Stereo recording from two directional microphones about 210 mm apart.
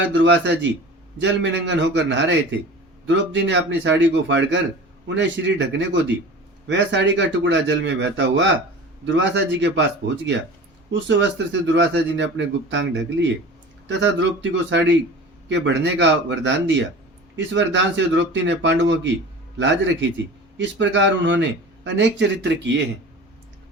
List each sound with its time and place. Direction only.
0.0 s a man's voice: 60° right (ahead or behind)
10.9 s a man's voice: 60° right (ahead or behind)